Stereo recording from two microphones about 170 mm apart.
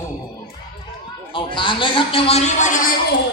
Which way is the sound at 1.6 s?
30° left (ahead or behind).